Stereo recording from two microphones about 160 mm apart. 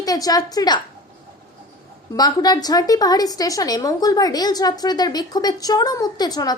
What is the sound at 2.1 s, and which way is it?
A woman's voice, 25° left (ahead or behind).